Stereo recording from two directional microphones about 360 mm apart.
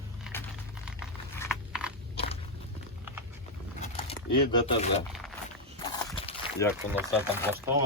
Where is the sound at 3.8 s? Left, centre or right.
Centre.